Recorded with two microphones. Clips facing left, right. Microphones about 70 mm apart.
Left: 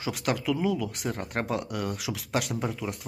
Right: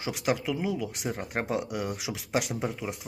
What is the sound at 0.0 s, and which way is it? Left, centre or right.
Speech, centre.